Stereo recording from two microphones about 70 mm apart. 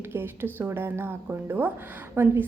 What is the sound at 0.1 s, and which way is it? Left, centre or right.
A woman's voice, right.